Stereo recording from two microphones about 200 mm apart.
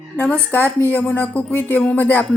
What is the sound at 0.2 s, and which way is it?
A woman's voice, 10° left (ahead or behind).